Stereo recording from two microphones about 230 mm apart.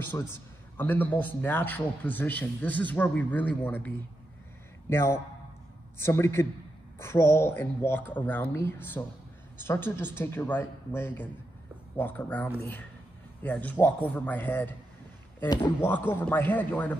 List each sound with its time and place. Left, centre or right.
0.7 s speech: centre